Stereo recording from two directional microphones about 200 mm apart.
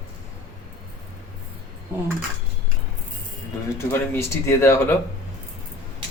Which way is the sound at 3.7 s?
10° left (ahead or behind).